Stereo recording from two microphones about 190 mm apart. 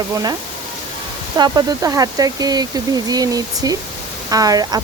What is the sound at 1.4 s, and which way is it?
Speech, 20° right (ahead or behind).